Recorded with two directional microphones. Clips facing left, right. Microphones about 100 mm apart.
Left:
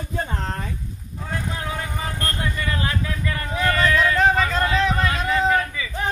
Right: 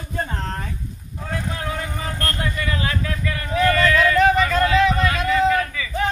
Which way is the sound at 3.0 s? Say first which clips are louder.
Right 1 dB; 20° left (ahead or behind).